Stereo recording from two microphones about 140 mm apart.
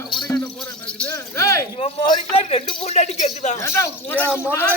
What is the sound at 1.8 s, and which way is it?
A man's voice, 40° left (ahead or behind).